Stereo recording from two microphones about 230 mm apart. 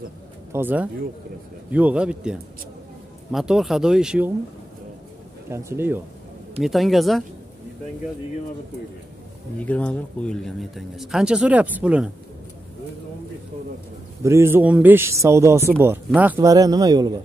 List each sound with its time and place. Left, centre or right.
0.5 s speech: centre
5.5 s a man's voice: centre
6.6 s speech: centre
9.6 s speech: centre
14.2 s a man's voice: centre